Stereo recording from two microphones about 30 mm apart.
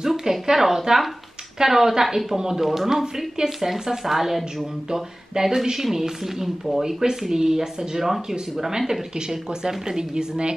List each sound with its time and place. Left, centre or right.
0.0 s a woman's voice: centre; by 10.5 s right